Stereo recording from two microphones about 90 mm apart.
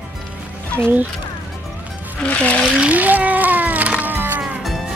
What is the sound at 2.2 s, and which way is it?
Speech, 15° left (ahead or behind).